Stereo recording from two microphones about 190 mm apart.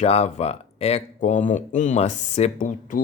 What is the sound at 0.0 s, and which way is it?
Speech, 35° left (ahead or behind).